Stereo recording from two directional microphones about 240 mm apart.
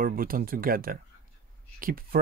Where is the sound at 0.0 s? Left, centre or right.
Right.